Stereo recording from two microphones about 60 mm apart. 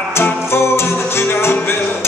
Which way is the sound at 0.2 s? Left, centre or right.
Left.